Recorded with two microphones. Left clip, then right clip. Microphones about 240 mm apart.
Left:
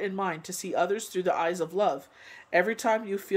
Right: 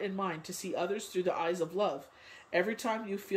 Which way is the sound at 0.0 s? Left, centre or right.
Centre.